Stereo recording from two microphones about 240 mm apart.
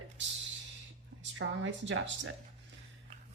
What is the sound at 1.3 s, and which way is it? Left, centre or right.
Speech, right.